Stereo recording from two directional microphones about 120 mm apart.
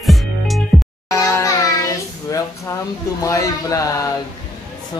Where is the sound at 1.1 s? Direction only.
25° left (ahead or behind).